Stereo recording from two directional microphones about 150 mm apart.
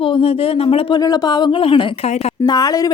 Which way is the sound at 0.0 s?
40° left (ahead or behind).